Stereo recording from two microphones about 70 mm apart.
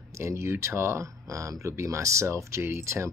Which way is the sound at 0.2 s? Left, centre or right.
Right.